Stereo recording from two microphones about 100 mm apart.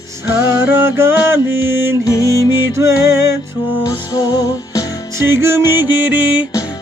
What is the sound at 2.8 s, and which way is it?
Music, 30° right (ahead or behind).